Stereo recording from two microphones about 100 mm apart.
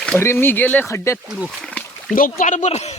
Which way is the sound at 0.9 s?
30° left (ahead or behind).